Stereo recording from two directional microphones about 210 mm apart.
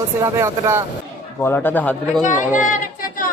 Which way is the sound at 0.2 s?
15° right (ahead or behind).